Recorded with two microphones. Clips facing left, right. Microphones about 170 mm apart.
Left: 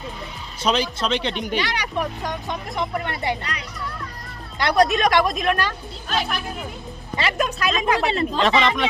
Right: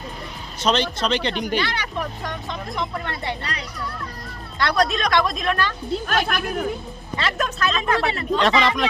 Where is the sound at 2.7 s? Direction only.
20° left (ahead or behind).